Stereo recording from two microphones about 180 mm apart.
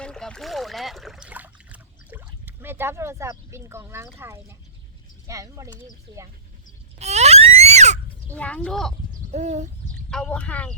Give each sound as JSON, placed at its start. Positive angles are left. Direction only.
{"t": 0.0, "sound": "rowboat", "side_deg": 5}
{"t": 5.3, "sound": "speech", "side_deg": -20}
{"t": 7.0, "sound": "a sound", "side_deg": -35}
{"t": 8.3, "sound": "speech", "side_deg": 10}
{"t": 9.3, "sound": "a sound", "side_deg": -40}
{"t": 10.1, "sound": "speech", "side_deg": 5}